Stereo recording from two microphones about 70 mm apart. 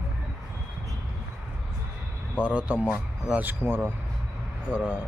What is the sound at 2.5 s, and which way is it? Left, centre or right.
A man's voice, centre.